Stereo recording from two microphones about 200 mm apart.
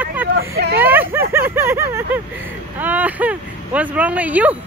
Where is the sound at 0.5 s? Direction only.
55° right (ahead or behind).